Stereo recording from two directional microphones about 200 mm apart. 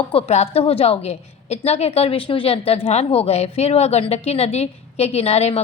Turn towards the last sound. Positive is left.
turn(degrees=30)  # may be behind; listen again after turning